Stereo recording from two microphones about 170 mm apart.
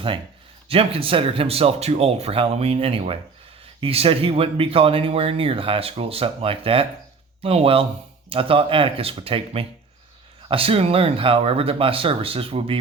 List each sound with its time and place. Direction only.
0.7 s speech: 35° right (ahead or behind)